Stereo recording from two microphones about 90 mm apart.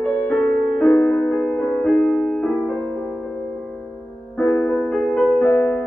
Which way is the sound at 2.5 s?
20° left (ahead or behind).